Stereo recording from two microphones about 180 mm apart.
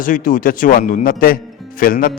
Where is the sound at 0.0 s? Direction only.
50° left (ahead or behind).